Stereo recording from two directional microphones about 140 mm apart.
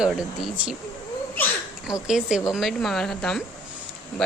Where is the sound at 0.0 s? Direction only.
5° right (ahead or behind).